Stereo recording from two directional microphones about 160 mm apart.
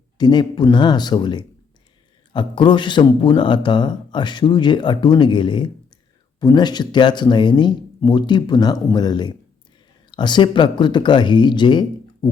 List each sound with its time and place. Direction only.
0.2 s a man's voice: 25° left (ahead or behind)